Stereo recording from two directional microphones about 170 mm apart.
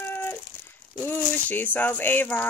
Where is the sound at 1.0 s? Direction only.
10° left (ahead or behind).